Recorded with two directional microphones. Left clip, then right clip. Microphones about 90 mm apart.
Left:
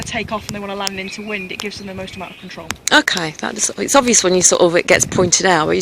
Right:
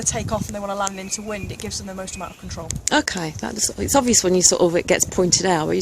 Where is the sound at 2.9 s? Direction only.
45° right (ahead or behind).